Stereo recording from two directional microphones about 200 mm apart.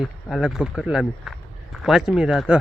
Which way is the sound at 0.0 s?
Centre (ahead or behind).